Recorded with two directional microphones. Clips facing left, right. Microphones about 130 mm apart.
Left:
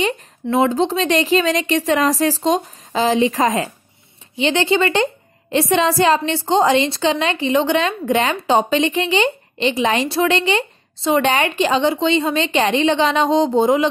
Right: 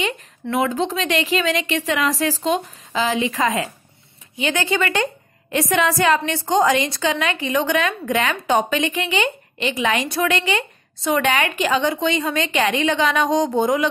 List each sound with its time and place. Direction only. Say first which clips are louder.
0.0 s a woman's voice: left 4 dB; 35° left (ahead or behind)